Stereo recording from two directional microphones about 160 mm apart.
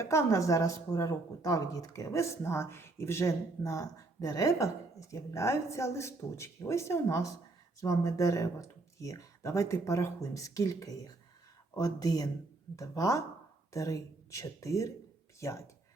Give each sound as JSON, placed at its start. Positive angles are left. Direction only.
{"t": 0.0, "sound": "a woman's voice", "side_deg": 15}